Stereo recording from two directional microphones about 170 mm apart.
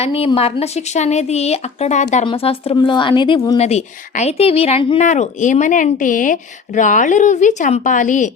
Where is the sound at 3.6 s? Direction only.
40° left (ahead or behind).